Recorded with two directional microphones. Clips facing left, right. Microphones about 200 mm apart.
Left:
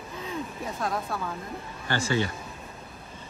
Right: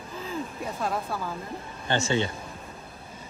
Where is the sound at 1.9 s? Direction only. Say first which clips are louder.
Right 1 dB; 25° right (ahead or behind).